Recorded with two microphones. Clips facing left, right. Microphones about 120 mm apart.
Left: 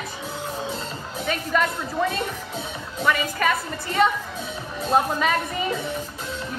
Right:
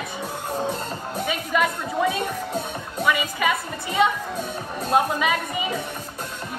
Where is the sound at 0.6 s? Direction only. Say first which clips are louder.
Right 3 dB; 55° right (ahead or behind).